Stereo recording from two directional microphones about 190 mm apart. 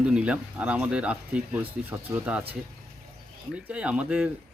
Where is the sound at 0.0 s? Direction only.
5° right (ahead or behind).